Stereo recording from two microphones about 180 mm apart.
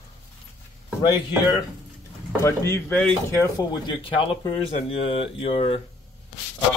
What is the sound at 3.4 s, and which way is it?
Speech, 25° left (ahead or behind).